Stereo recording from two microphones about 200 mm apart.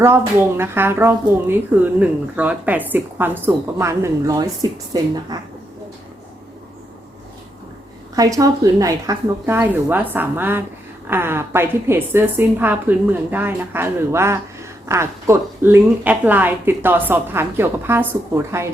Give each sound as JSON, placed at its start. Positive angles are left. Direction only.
{"t": 0.0, "sound": "speech", "side_deg": -10}
{"t": 8.1, "sound": "speech", "side_deg": -15}